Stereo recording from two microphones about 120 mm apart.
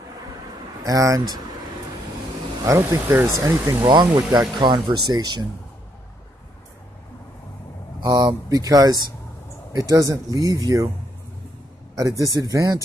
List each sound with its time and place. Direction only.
0.8 s speech: 30° right (ahead or behind)
2.6 s speech: 25° right (ahead or behind)
8.0 s speech: 30° right (ahead or behind)
11.9 s speech: 30° right (ahead or behind)